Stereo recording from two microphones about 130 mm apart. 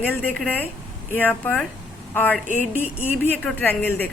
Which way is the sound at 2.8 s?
15° right (ahead or behind).